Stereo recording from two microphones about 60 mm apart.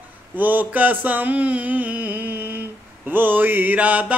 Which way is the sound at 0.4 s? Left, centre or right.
Right.